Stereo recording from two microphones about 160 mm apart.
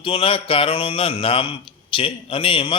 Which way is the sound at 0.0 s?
35° left (ahead or behind).